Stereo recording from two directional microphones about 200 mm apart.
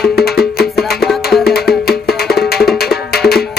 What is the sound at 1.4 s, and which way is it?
Music, 50° left (ahead or behind).